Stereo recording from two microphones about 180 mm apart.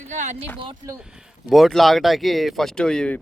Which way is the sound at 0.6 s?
25° right (ahead or behind).